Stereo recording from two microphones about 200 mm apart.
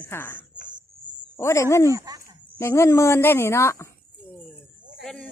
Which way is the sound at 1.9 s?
15° right (ahead or behind).